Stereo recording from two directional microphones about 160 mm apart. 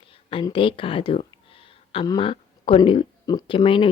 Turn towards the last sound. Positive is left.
turn(degrees=30)  # may be behind; listen again after turning